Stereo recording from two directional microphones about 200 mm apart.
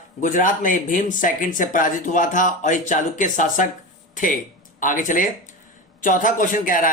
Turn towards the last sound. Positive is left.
turn(degrees=40)  # may be behind; listen again after turning